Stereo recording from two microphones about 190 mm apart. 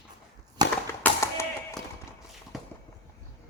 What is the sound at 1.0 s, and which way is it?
Tap, 10° left (ahead or behind).